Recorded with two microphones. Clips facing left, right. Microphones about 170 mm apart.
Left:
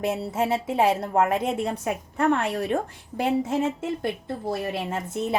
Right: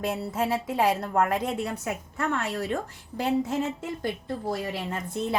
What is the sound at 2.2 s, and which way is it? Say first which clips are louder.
Speech: left 6 dB; 60° left (ahead or behind).